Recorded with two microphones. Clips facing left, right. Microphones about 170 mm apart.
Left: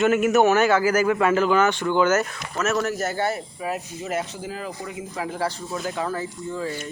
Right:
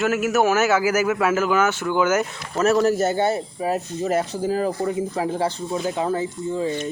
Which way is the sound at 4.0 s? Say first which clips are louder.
Right 8 dB; 35° right (ahead or behind).